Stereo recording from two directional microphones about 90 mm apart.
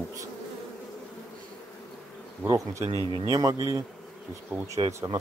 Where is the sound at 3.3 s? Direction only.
45° right (ahead or behind).